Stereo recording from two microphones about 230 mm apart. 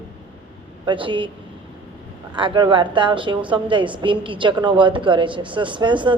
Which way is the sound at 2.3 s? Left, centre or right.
Right.